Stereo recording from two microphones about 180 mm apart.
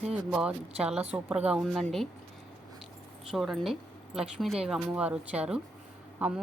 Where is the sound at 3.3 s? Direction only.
Centre (ahead or behind).